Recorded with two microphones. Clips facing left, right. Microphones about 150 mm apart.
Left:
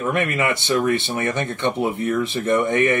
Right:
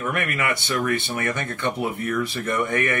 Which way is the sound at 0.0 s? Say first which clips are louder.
Left 4 dB; 25° left (ahead or behind).